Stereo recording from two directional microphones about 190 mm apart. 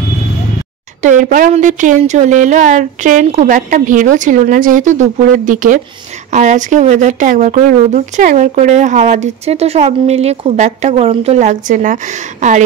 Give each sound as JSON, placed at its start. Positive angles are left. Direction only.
{"t": 1.0, "sound": "a woman's voice", "side_deg": -40}